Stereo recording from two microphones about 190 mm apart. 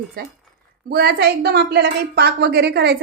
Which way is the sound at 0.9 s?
55° right (ahead or behind).